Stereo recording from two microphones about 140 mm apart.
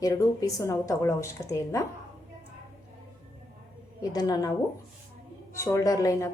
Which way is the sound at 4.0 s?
30° left (ahead or behind).